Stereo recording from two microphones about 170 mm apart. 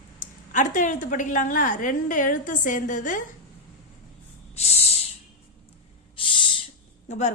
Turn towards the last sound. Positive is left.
turn(degrees=45)  # may be behind; listen again after turning